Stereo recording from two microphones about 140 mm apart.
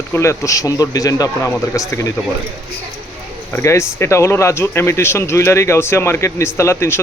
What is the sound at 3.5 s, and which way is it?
A man's voice, 20° left (ahead or behind).